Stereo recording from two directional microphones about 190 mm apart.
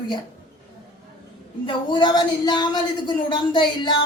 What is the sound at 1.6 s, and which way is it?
A woman's voice, 25° left (ahead or behind).